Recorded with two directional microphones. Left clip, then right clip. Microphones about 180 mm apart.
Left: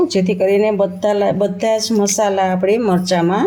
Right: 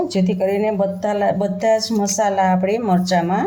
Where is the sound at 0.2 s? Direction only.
45° left (ahead or behind).